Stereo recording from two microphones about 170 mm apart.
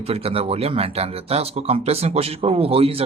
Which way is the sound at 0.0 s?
35° right (ahead or behind).